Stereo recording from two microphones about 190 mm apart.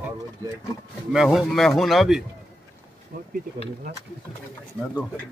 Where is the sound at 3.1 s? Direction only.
50° right (ahead or behind).